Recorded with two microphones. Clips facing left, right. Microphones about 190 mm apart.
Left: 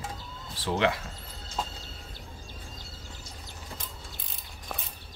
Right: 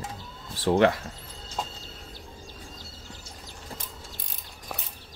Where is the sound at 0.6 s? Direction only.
50° right (ahead or behind).